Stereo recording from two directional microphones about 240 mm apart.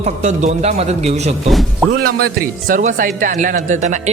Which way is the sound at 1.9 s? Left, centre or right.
Right.